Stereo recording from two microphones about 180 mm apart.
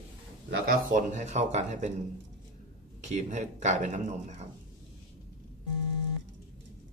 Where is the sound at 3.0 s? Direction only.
40° right (ahead or behind).